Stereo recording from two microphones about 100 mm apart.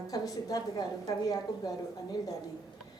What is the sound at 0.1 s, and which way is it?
A woman's voice, 40° left (ahead or behind).